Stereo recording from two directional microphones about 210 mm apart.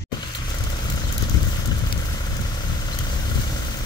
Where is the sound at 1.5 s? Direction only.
20° left (ahead or behind).